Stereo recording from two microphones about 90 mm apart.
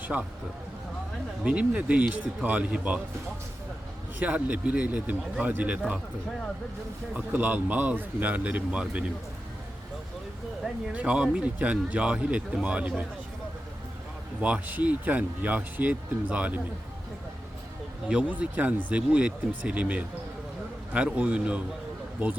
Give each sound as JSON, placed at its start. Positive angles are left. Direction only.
{"t": 0.0, "sound": "speech", "side_deg": -15}
{"t": 1.5, "sound": "a man's voice", "side_deg": -15}
{"t": 4.2, "sound": "a man's voice", "side_deg": -15}
{"t": 7.1, "sound": "a man's voice", "side_deg": -20}
{"t": 10.9, "sound": "a man's voice", "side_deg": -15}
{"t": 14.4, "sound": "a man's voice", "side_deg": -15}
{"t": 18.1, "sound": "a man's voice", "side_deg": -15}